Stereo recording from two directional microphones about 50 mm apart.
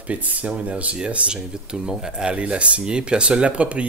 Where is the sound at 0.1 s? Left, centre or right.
Right.